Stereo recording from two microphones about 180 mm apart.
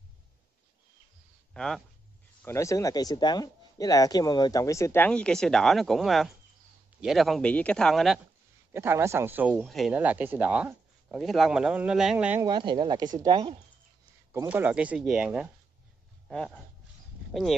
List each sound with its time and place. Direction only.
1.5 s speech: 5° left (ahead or behind)
2.4 s a man's voice: 15° left (ahead or behind); by 8.2 s centre (ahead or behind)
8.7 s speech: 15° right (ahead or behind)
12.4 s speech: 25° right (ahead or behind)
14.3 s speech: 10° right (ahead or behind)
17.3 s speech: centre (ahead or behind)